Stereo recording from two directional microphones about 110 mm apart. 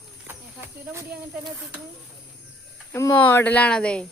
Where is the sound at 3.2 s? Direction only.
15° left (ahead or behind).